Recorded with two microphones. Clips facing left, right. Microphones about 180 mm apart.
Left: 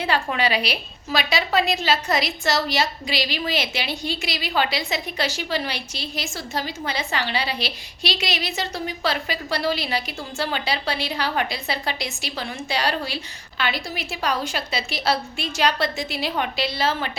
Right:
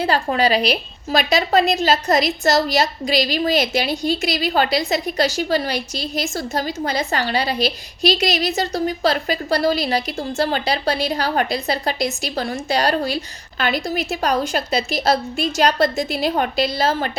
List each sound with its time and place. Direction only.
0.0 s a woman's voice: 40° right (ahead or behind)